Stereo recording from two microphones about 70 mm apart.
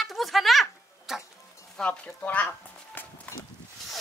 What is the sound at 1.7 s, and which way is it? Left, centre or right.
Speech, centre.